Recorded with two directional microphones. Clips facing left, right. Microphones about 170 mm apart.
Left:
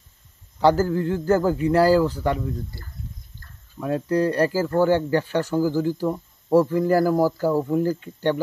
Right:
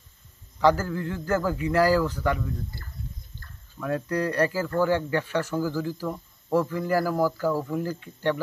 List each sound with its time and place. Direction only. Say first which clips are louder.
0.6 s a man's voice: left 4 dB; 30° left (ahead or behind)
3.8 s speech: left 5 dB; 25° left (ahead or behind)